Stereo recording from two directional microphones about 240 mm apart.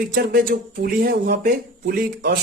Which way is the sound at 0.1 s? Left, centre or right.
Right.